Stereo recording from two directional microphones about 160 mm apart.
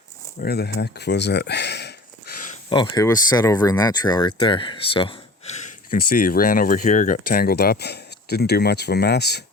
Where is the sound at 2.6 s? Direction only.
30° left (ahead or behind).